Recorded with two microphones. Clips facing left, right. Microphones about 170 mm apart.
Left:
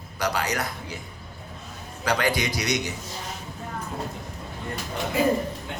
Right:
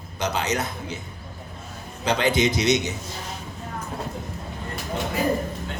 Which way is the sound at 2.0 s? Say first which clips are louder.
Right 3 dB; 20° right (ahead or behind).